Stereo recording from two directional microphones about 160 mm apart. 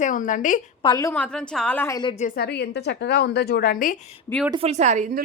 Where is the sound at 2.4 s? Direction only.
90° left; by 4.1 s 55° left (ahead or behind).